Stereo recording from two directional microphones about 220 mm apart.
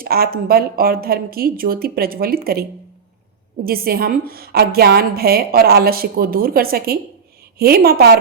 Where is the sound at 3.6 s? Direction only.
40° right (ahead or behind).